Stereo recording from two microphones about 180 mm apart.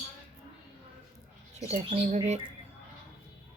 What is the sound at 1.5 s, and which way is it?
Speech, 35° right (ahead or behind).